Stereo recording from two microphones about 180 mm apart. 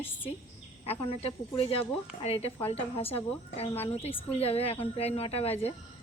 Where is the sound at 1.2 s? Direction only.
30° left (ahead or behind).